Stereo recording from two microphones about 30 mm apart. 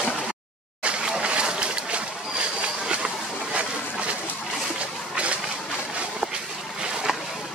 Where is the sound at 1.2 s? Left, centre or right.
Right.